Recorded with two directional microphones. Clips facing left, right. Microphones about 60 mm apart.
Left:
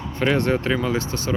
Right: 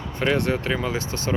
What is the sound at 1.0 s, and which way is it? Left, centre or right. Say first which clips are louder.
Speech: left 2 dB; right.